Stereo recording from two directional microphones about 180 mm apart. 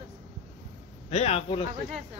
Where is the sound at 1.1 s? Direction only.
35° left (ahead or behind).